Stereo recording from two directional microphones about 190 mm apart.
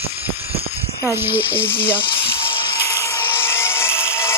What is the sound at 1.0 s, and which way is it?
Speech, 10° right (ahead or behind).